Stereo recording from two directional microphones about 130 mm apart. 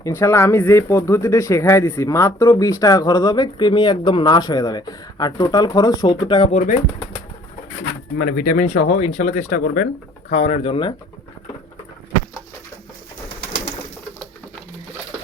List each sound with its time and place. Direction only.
0.0 s speech: 20° left (ahead or behind); by 6.5 s 40° left (ahead or behind)
6.5 s speech: 65° left (ahead or behind)
8.4 s speech: 90° left
10.3 s speech: 55° left (ahead or behind)